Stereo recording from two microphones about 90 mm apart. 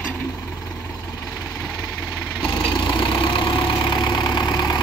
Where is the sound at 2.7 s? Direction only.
65° left (ahead or behind).